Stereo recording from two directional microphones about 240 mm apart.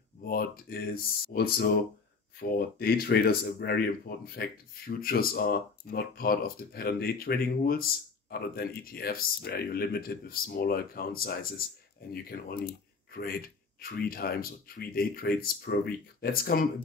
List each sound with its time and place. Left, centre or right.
0.2 s speech: left
2.8 s speech: left